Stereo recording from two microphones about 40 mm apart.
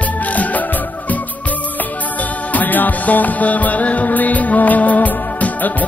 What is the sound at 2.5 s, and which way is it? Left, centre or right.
Music, left.